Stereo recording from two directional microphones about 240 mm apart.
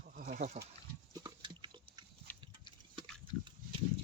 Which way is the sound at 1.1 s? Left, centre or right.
Centre.